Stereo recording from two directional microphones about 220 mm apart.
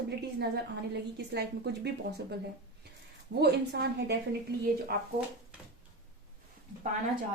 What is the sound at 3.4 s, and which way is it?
Speech, 45° right (ahead or behind).